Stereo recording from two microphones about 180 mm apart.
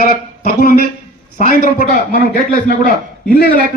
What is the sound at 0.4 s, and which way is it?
Speech, 55° left (ahead or behind).